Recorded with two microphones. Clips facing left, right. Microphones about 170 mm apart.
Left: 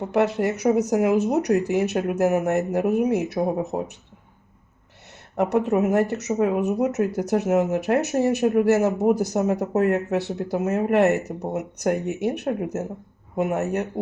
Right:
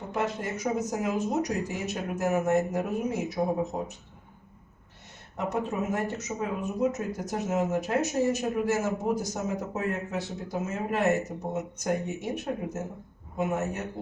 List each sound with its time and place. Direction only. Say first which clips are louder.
0.1 s speech: left 9 dB; 70° left (ahead or behind)
5.4 s speech: left 9 dB; 70° left (ahead or behind)